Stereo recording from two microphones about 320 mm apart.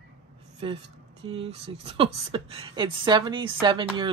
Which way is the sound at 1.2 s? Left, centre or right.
Centre.